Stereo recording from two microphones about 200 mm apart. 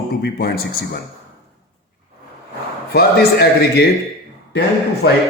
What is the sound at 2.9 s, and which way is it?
Speech, 50° left (ahead or behind).